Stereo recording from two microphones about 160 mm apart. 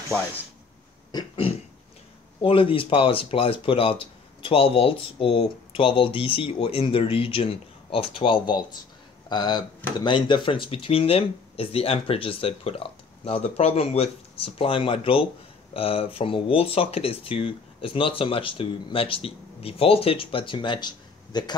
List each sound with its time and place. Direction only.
1.1 s throat clearing: 35° left (ahead or behind)
2.4 s speech: 35° left (ahead or behind)